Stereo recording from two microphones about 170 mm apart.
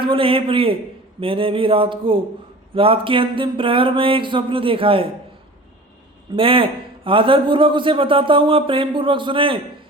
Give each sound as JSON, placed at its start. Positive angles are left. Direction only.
{"t": 0.0, "sound": "a man's voice", "side_deg": -30}
{"t": 6.3, "sound": "a man's voice", "side_deg": -30}